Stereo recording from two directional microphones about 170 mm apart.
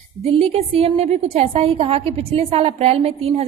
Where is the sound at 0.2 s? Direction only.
35° right (ahead or behind).